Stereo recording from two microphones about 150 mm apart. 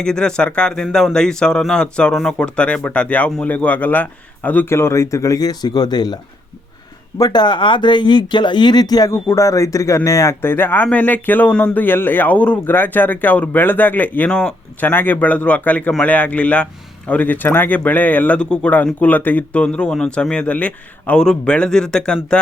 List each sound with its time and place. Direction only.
0.0 s a man's voice: 5° left (ahead or behind); by 6.1 s 25° left (ahead or behind)
7.2 s a man's voice: 30° left (ahead or behind); by 22.4 s 5° left (ahead or behind)